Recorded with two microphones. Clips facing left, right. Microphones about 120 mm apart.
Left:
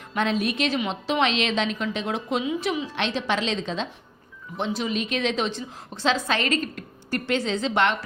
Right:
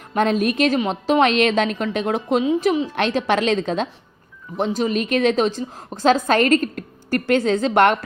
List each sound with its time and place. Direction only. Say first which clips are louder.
0.1 s a woman's voice: right 6 dB; 45° right (ahead or behind)
4.5 s a woman's voice: right 6 dB; 40° right (ahead or behind)